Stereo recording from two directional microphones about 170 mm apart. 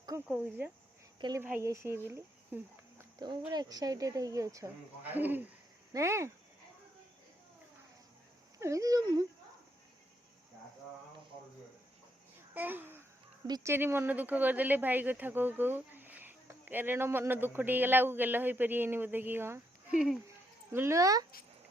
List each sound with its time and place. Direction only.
0.3 s speech: 10° right (ahead or behind)
3.5 s speech: 25° right (ahead or behind)
8.5 s speech: 20° right (ahead or behind)
12.5 s a child's voice: 10° right (ahead or behind)
20.7 s speech: 15° right (ahead or behind)